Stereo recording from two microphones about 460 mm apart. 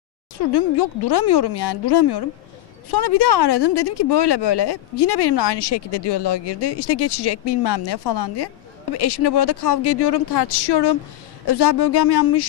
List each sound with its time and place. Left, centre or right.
0.4 s speech: left